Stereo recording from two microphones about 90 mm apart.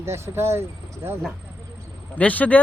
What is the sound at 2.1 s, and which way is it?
Speech, 15° left (ahead or behind).